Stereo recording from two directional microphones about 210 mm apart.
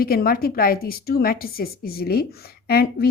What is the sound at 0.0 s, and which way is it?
A woman's voice, 45° left (ahead or behind).